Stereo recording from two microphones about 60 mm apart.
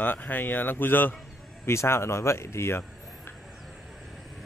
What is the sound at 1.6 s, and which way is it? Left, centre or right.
Speech, left.